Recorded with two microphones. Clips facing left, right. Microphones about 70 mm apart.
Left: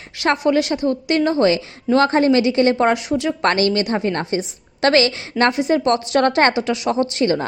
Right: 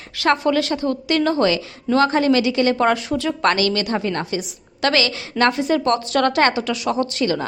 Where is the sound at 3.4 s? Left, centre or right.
Left.